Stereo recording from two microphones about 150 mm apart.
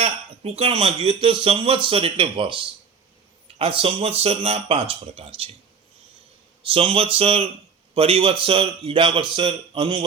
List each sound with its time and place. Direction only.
0.0 s speech: 40° right (ahead or behind)
6.6 s speech: 40° right (ahead or behind)